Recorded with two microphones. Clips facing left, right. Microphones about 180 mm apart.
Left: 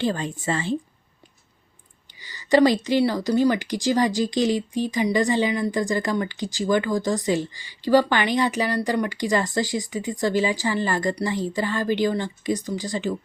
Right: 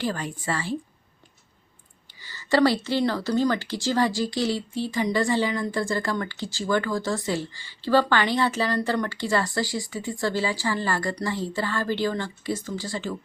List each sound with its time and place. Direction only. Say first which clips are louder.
0.0 s a woman's voice: left 4 dB; 25° left (ahead or behind)
2.2 s speech: left 3 dB; 15° left (ahead or behind)